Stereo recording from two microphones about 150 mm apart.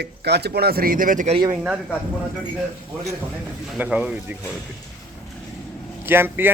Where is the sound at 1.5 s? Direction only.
5° right (ahead or behind).